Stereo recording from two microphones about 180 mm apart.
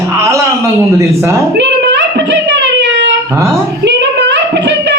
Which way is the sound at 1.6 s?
80° right.